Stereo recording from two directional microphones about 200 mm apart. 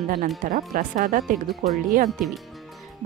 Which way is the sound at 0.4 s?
45° right (ahead or behind).